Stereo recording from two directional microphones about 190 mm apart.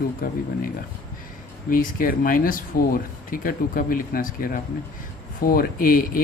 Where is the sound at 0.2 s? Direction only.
50° left (ahead or behind).